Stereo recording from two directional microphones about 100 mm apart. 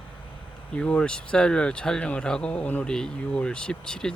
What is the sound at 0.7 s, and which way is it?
Speech, 10° left (ahead or behind).